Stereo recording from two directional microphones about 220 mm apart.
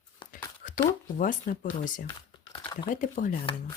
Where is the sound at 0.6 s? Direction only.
40° left (ahead or behind).